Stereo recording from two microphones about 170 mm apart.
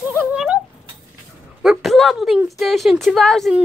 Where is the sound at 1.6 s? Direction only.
Centre (ahead or behind).